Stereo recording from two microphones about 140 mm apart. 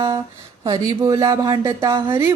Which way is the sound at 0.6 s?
25° right (ahead or behind).